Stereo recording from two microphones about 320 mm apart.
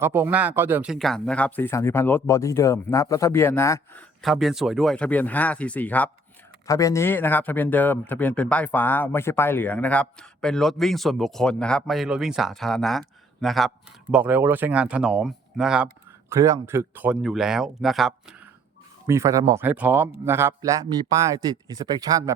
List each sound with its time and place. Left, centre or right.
0.0 s speech: centre